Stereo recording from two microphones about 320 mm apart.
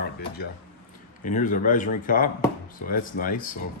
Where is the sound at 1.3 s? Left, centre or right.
Left.